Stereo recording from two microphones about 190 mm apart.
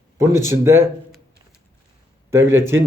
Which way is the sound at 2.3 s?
15° right (ahead or behind).